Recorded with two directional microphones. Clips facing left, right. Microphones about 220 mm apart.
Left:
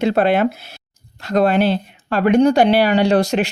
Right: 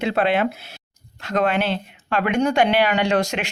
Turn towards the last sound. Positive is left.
turn(degrees=35)  # may be behind; listen again after turning